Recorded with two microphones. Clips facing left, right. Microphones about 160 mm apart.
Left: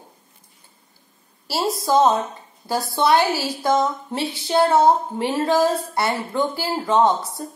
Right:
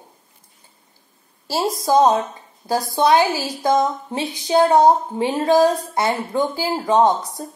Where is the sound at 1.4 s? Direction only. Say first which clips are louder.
Right 2 dB; 20° right (ahead or behind).